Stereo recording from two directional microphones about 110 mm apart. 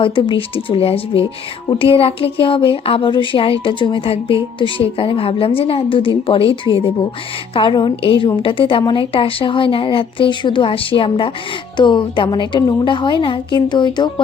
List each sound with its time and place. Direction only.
0.0 s a woman's voice: 50° left (ahead or behind)